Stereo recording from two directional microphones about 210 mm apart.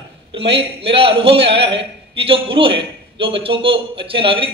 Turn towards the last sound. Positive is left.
turn(degrees=-25)  # may be behind; listen again after turning